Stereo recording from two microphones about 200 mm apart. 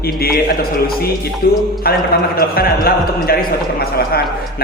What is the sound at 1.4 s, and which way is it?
A man's voice, 50° left (ahead or behind).